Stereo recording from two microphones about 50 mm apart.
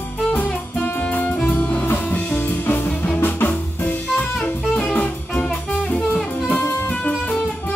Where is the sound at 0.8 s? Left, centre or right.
Left.